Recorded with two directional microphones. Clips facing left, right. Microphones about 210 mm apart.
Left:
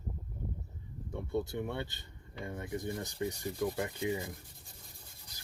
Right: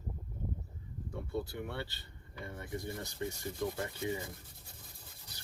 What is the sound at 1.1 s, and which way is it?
Speech, 20° left (ahead or behind).